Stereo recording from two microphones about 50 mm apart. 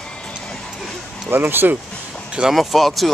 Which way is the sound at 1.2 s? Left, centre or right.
Right.